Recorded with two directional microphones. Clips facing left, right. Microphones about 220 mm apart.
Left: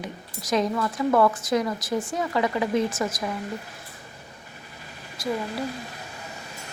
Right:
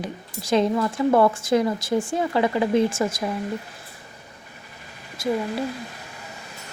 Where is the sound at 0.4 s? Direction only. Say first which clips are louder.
Right 4 dB; 30° right (ahead or behind).